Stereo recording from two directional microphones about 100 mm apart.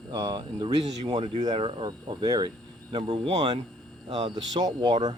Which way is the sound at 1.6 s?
60° right (ahead or behind).